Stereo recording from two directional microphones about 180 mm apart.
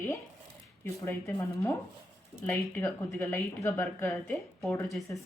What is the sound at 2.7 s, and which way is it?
A woman's voice, 15° left (ahead or behind).